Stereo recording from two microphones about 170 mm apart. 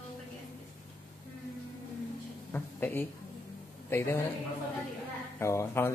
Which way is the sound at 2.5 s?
10° left (ahead or behind).